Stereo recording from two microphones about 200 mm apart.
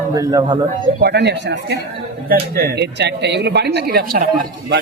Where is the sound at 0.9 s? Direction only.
55° right (ahead or behind).